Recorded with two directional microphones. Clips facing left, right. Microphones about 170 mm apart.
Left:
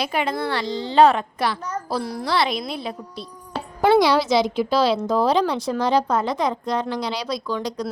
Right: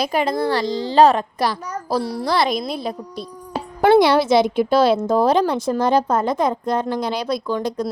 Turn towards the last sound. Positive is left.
turn(degrees=-50)  # may be behind; listen again after turning